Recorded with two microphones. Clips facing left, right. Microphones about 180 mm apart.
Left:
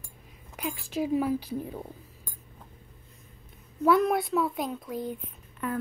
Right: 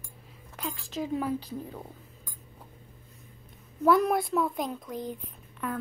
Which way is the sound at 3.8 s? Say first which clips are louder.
Even; centre (ahead or behind).